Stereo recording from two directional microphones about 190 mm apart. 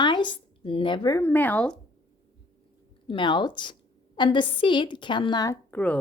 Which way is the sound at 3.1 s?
25° left (ahead or behind).